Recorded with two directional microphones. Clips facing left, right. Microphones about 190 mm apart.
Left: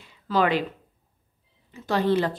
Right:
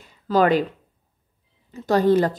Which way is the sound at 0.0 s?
45° right (ahead or behind).